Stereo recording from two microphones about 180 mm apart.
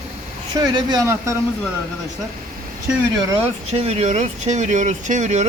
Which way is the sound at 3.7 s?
35° right (ahead or behind).